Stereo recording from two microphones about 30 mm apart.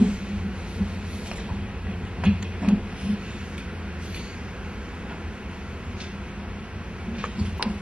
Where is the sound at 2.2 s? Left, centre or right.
Right.